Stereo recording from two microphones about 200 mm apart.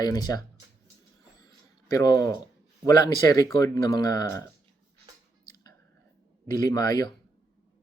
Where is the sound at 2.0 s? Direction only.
20° left (ahead or behind).